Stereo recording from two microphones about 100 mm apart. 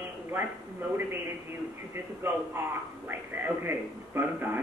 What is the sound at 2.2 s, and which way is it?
A man's voice, 20° right (ahead or behind).